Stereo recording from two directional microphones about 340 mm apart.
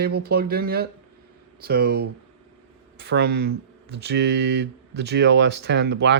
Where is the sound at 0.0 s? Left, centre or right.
Right.